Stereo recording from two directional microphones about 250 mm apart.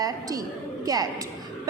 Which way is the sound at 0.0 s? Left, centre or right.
Centre.